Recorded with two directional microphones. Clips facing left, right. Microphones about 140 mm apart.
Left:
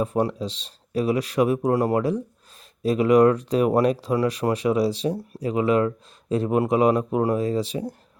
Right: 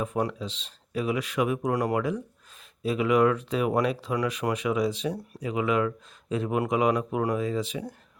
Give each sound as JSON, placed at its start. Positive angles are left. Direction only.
{"t": 0.0, "sound": "speech", "side_deg": 35}